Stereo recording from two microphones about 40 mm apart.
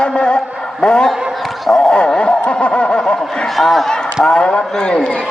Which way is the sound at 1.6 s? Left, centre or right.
Centre.